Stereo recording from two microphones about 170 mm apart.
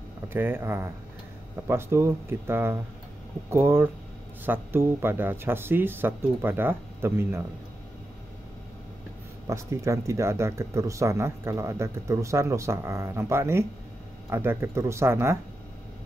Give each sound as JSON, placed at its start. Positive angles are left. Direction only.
{"t": 0.3, "sound": "speech", "side_deg": -10}
{"t": 9.5, "sound": "speech", "side_deg": -15}